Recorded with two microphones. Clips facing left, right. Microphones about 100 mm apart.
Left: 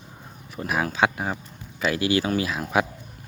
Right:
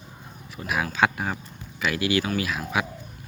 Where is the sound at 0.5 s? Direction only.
40° left (ahead or behind).